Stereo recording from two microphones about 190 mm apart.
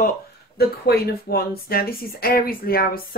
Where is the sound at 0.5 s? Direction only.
55° left (ahead or behind).